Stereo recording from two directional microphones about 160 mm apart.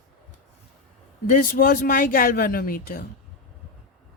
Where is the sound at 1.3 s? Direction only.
55° left (ahead or behind).